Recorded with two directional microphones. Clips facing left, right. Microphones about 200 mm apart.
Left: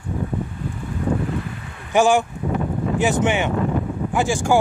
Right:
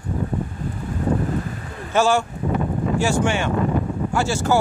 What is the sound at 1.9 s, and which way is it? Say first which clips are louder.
Speech: left 2 dB; 15° left (ahead or behind).